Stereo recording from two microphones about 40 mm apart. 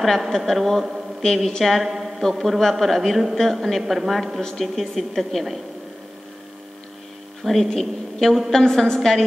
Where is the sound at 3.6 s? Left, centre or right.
Centre.